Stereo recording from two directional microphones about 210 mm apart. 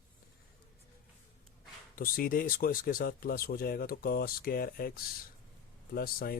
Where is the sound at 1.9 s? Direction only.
45° left (ahead or behind).